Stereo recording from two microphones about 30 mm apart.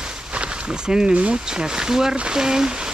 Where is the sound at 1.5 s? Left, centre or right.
Right.